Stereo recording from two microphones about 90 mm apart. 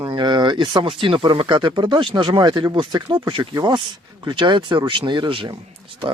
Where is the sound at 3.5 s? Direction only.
50° right (ahead or behind).